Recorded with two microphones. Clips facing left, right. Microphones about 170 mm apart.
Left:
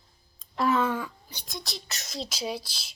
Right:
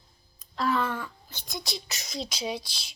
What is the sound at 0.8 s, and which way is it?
Speech, 15° left (ahead or behind).